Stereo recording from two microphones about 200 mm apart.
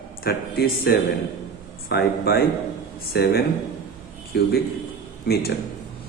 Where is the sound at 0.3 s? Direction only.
50° left (ahead or behind).